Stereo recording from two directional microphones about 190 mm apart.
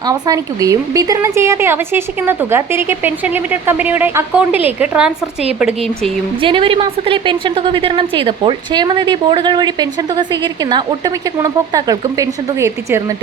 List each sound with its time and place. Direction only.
0.0 s a woman's voice: 20° right (ahead or behind)
6.4 s a woman's voice: 25° right (ahead or behind)